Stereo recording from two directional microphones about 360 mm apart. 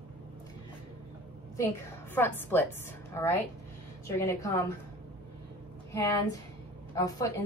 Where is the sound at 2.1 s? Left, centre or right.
Centre.